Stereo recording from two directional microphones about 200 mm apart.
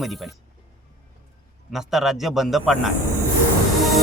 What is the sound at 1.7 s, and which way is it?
Speech, centre (ahead or behind).